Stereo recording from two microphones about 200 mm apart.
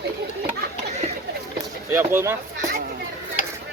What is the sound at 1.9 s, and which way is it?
Speech, 15° right (ahead or behind).